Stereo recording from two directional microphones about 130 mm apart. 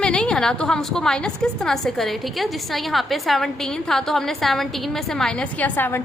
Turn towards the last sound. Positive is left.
turn(degrees=15)  # may be behind; listen again after turning